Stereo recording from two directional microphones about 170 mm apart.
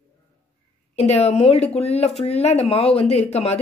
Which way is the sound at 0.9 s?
40° left (ahead or behind).